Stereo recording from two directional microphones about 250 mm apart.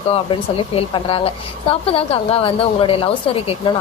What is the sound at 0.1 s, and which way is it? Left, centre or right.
Speech, left.